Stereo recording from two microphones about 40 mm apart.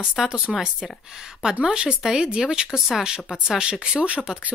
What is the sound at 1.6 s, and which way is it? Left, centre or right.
Speech, right.